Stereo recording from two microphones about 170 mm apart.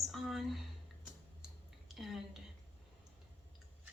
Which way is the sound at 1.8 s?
Centre (ahead or behind).